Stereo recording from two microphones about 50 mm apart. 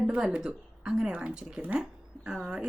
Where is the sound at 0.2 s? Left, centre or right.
Centre.